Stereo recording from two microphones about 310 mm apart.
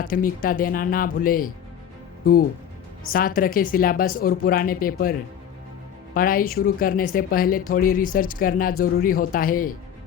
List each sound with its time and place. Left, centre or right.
0.0 s speech: left
6.1 s speech: left